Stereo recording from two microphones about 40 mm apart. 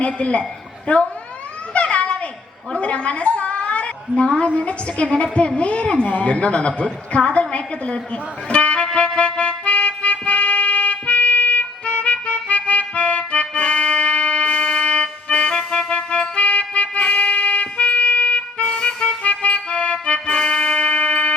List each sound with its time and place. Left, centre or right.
0.0 s a man's voice: left
1.7 s children playing: left
2.7 s a woman's voice: left
9.0 s music: left